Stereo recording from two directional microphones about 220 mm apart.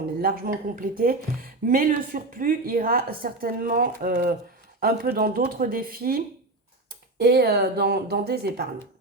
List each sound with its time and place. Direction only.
0.2 s speech: 45° right (ahead or behind)